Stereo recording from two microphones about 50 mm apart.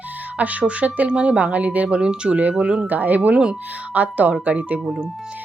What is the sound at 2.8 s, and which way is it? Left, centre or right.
Speech, right.